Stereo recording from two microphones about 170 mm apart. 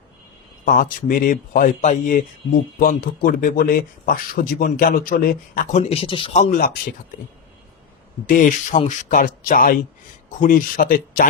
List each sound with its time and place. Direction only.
0.6 s speech: 55° left (ahead or behind); by 6.4 s 30° left (ahead or behind)
6.4 s speech: 55° left (ahead or behind)
8.3 s speech: 50° left (ahead or behind)